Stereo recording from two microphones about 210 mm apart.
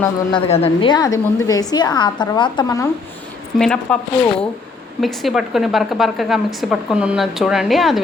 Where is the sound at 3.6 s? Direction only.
5° left (ahead or behind).